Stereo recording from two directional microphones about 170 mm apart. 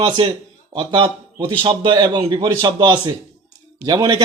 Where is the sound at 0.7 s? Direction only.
30° right (ahead or behind).